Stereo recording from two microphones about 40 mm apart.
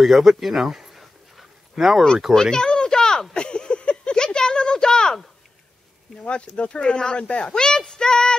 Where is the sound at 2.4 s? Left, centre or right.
Centre.